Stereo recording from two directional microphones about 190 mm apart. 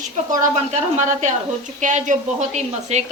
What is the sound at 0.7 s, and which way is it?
Speech, 40° right (ahead or behind).